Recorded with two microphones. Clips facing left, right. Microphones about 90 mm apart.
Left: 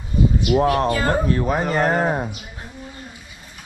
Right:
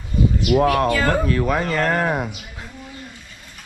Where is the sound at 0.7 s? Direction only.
25° left (ahead or behind).